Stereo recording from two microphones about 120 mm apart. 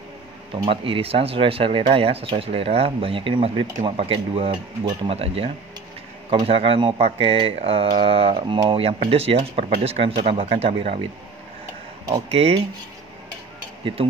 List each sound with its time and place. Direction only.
0.7 s speech: 50° right (ahead or behind)
12.3 s speech: 60° right (ahead or behind)
13.9 s speech: 50° right (ahead or behind)